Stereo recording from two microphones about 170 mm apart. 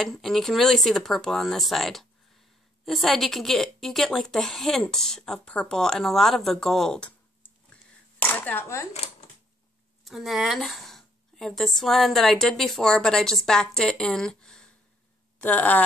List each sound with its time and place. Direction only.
0.0 s a woman's voice: centre (ahead or behind)
8.9 s a sound: 40° left (ahead or behind)
10.0 s a woman's voice: centre (ahead or behind)